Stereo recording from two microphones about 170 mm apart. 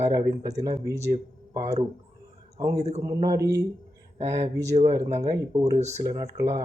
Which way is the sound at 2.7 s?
40° right (ahead or behind).